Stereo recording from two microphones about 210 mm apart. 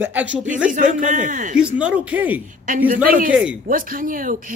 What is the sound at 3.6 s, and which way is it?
Speech, 40° right (ahead or behind).